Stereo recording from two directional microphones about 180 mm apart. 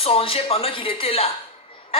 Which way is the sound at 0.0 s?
30° left (ahead or behind).